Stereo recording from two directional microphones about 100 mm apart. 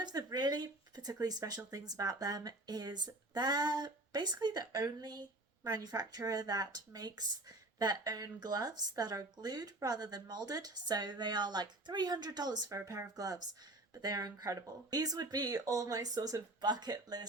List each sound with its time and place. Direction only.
0.0 s speech: 45° right (ahead or behind)